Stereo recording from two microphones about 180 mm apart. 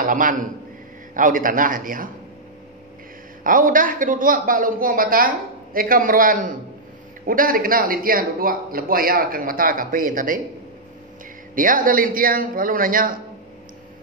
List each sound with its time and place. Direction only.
0.0 s a man's voice: 50° right (ahead or behind)
3.4 s a man's voice: 50° right (ahead or behind)
11.5 s a man's voice: 50° right (ahead or behind)